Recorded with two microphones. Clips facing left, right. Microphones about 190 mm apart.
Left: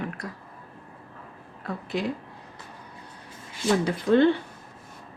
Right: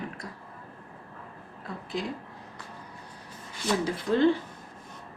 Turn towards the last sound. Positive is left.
turn(degrees=65)  # may be behind; listen again after turning